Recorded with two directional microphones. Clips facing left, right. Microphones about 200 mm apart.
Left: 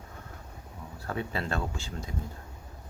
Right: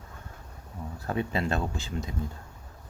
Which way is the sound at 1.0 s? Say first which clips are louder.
Right 4 dB; 20° right (ahead or behind).